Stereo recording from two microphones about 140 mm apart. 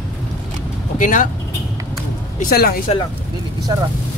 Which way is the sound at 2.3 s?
90° left.